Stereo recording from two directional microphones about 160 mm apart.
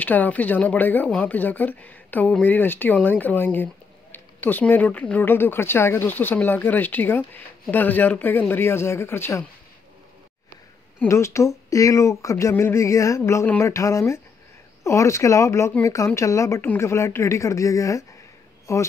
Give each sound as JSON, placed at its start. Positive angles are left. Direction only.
{"t": 0.0, "sound": "speech", "side_deg": 10}
{"t": 11.0, "sound": "speech", "side_deg": 15}